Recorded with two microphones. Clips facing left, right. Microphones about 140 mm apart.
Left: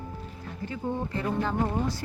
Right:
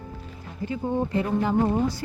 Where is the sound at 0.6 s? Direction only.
15° right (ahead or behind).